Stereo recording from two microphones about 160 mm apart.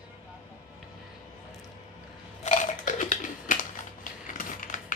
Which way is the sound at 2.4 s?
50° left (ahead or behind).